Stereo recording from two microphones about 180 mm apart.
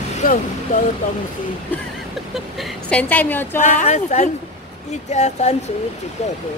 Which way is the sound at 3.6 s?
45° left (ahead or behind).